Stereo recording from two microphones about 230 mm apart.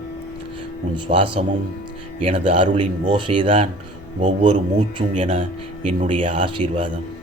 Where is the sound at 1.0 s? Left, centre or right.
Right.